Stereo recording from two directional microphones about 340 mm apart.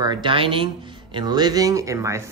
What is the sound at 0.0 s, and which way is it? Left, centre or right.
Speech, centre.